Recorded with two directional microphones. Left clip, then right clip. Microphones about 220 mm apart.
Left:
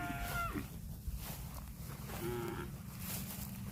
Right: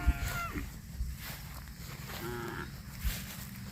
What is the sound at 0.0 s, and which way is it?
Boat, 35° left (ahead or behind).